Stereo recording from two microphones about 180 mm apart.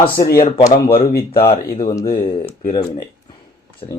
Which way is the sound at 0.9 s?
60° left (ahead or behind).